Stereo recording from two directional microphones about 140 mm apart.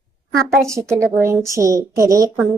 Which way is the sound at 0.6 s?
20° right (ahead or behind).